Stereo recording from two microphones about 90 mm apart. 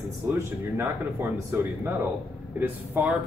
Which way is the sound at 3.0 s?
20° right (ahead or behind).